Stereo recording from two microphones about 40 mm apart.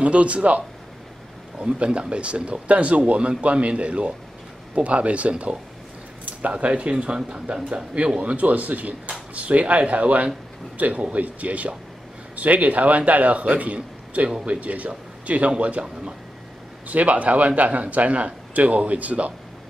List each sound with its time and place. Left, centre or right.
0.0 s a man's voice: right
6.5 s speech: right
7.7 s a man's voice: right
15.8 s speech: right
16.8 s a man's voice: right